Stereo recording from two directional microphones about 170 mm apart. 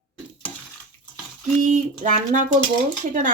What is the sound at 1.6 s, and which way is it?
Speech, 50° right (ahead or behind).